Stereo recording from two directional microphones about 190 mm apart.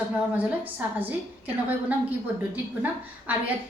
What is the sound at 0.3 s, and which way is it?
Speech, 10° right (ahead or behind).